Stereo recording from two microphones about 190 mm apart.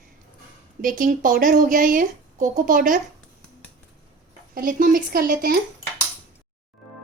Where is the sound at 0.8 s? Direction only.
45° right (ahead or behind).